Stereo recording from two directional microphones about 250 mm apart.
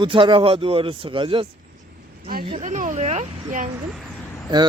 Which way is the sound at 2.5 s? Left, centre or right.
Right.